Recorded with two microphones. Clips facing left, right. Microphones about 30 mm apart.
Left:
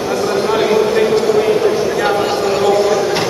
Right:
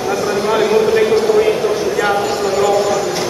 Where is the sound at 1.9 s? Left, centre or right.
Centre.